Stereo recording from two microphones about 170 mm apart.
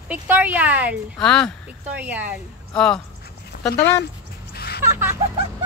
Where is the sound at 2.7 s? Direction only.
5° left (ahead or behind).